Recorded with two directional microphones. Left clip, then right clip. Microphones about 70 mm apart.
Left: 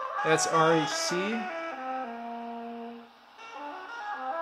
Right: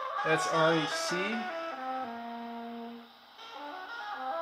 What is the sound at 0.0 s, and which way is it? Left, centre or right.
Music, centre.